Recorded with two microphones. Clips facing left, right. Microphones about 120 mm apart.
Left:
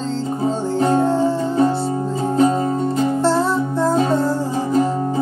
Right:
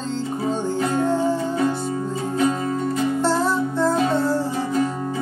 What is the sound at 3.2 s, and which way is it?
Music, centre (ahead or behind).